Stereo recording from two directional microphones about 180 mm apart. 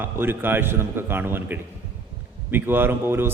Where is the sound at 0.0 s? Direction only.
10° right (ahead or behind).